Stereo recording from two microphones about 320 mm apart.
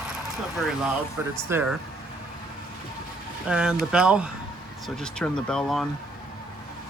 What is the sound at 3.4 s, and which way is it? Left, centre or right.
Speech, centre.